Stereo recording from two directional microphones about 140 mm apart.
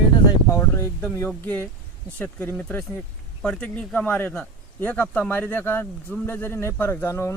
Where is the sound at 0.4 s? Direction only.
20° left (ahead or behind).